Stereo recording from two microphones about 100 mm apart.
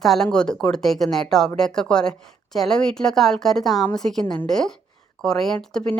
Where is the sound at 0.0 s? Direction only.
5° left (ahead or behind).